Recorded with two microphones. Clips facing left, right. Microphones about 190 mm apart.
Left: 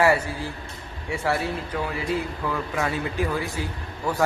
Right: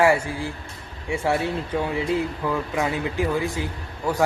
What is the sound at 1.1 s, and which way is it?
Speech, 25° right (ahead or behind).